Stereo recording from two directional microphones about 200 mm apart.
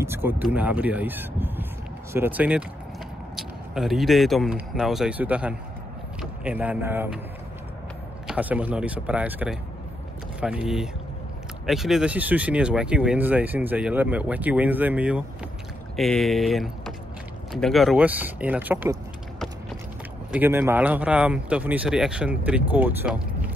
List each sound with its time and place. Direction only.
0.0 s speech: 10° right (ahead or behind)
8.3 s speech: 5° right (ahead or behind)
20.2 s speech: 10° right (ahead or behind)